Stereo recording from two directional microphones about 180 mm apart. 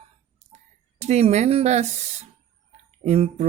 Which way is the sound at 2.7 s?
35° right (ahead or behind).